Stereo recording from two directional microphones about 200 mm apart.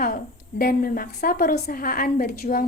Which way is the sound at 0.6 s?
45° left (ahead or behind).